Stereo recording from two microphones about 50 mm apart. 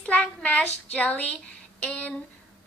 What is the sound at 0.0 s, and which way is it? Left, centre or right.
Speech, left.